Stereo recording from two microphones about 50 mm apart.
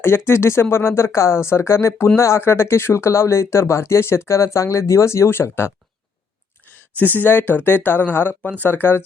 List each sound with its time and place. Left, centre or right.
0.0 s speech: left
6.7 s speech: left